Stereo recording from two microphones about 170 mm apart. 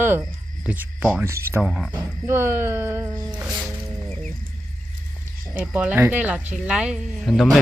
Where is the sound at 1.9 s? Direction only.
15° right (ahead or behind).